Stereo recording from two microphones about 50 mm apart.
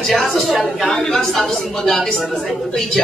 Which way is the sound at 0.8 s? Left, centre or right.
Left.